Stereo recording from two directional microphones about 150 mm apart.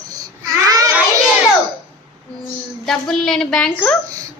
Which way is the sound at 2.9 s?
5° left (ahead or behind).